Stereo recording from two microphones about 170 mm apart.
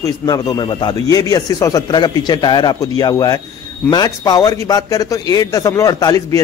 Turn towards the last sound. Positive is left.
turn(degrees=20)  # may be behind; listen again after turning